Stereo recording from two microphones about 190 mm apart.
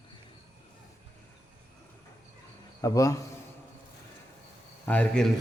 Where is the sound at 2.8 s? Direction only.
20° left (ahead or behind).